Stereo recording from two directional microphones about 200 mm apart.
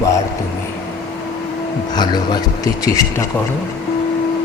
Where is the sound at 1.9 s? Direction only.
20° left (ahead or behind).